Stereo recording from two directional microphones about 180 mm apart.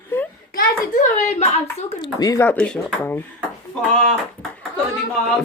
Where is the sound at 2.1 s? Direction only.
20° left (ahead or behind).